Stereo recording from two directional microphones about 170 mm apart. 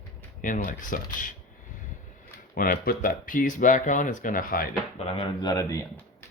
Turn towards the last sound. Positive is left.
turn(degrees=20)  # may be behind; listen again after turning